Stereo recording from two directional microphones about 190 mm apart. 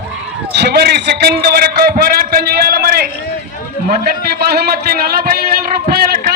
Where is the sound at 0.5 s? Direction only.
60° right (ahead or behind).